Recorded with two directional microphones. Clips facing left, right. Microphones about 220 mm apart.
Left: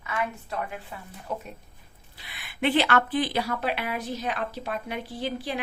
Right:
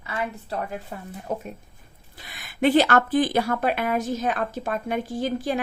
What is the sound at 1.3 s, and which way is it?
Speech, 50° right (ahead or behind).